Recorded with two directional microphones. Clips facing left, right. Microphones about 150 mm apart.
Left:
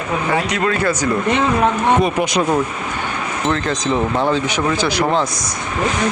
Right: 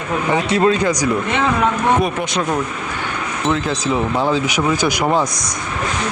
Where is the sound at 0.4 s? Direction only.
25° right (ahead or behind).